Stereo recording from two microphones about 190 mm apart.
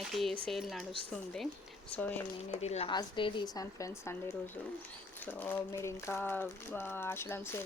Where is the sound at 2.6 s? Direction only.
35° left (ahead or behind); by 4.2 s 15° left (ahead or behind).